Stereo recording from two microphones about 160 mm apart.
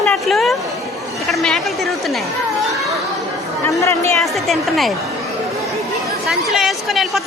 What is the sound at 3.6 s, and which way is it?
Speech, 15° left (ahead or behind).